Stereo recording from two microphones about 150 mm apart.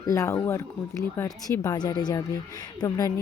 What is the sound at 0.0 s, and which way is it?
Speech, 20° left (ahead or behind).